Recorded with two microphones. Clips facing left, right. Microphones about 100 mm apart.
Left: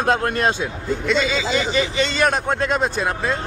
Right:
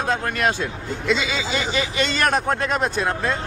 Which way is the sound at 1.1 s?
Centre (ahead or behind).